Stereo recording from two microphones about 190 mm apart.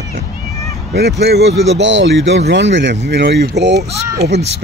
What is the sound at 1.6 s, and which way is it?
Speech, 70° right (ahead or behind).